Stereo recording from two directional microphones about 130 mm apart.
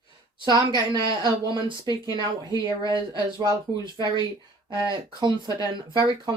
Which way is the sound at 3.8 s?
35° right (ahead or behind).